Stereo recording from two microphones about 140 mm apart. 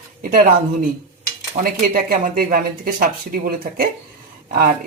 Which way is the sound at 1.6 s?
80° right.